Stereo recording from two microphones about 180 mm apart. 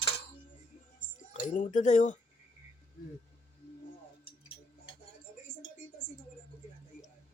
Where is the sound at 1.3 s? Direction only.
45° left (ahead or behind).